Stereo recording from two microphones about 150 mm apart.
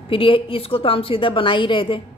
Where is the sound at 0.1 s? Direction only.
35° left (ahead or behind).